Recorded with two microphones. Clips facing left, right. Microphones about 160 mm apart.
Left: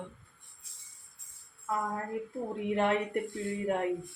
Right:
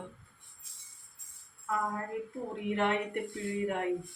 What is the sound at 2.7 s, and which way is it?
Speech, 40° left (ahead or behind).